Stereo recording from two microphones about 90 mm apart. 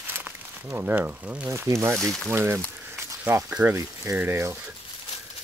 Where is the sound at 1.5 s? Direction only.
30° right (ahead or behind).